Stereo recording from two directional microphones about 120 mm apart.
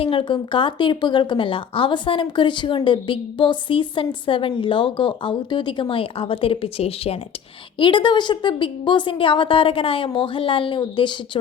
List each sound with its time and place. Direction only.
0.0 s speech: 50° left (ahead or behind)
7.8 s speech: 40° left (ahead or behind)